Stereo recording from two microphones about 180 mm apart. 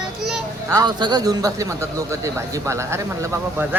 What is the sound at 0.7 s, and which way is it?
Speech, 20° right (ahead or behind).